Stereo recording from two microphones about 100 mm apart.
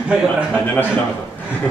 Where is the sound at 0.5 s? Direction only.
15° left (ahead or behind).